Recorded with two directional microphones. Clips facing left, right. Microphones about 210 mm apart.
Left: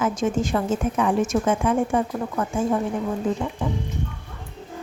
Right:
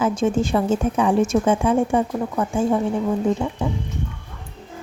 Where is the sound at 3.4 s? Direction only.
25° right (ahead or behind).